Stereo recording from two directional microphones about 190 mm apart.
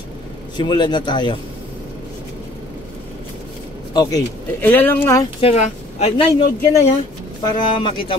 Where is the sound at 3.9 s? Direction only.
20° left (ahead or behind).